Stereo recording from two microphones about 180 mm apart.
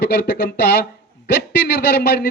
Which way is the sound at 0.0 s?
65° left (ahead or behind).